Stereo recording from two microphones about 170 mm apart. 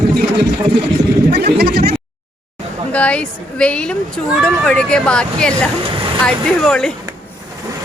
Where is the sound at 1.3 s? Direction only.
70° right (ahead or behind).